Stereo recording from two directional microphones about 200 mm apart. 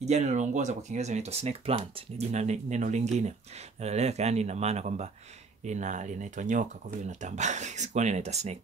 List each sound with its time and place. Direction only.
0.0 s speech: 35° right (ahead or behind)